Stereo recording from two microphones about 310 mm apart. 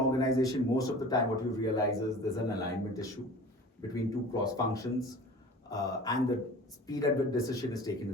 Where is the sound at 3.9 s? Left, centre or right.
Centre.